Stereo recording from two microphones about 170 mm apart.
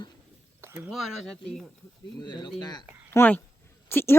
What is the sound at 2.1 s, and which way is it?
Speech, 25° left (ahead or behind).